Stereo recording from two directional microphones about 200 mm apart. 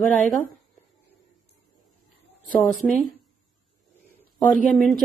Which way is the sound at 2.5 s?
5° left (ahead or behind).